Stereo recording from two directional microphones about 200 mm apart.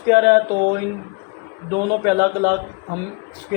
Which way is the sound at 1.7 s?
45° right (ahead or behind).